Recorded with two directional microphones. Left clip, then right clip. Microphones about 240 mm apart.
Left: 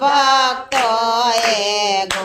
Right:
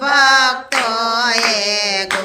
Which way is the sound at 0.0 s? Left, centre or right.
Centre.